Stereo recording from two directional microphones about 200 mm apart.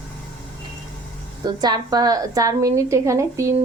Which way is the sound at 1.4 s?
20° right (ahead or behind).